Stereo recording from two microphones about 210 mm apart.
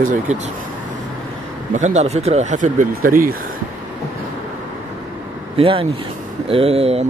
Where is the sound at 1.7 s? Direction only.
35° right (ahead or behind).